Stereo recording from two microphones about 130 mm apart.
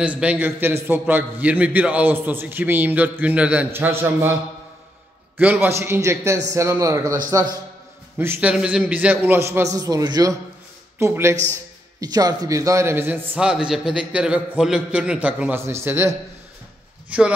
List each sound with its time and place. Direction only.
0.0 s a man's voice: 10° right (ahead or behind)
5.4 s a man's voice: 15° right (ahead or behind)
8.2 s a man's voice: 15° right (ahead or behind)
12.0 s a man's voice: 30° right (ahead or behind); by 17.3 s 10° right (ahead or behind)